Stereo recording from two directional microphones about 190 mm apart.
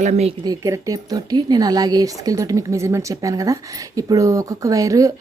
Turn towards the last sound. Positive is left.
turn(degrees=-20)  # may be behind; listen again after turning